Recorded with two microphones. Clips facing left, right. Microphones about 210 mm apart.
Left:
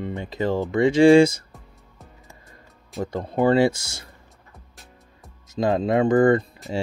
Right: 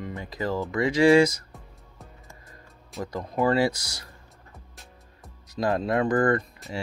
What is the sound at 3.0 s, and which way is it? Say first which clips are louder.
Speech: left 4 dB; 30° left (ahead or behind).